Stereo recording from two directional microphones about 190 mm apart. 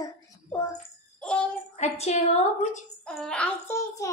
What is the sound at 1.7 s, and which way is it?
Speech, 35° left (ahead or behind).